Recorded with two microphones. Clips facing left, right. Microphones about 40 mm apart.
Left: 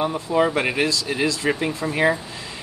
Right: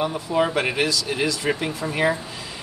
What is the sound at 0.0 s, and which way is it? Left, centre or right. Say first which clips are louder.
Speech: left 2 dB; centre.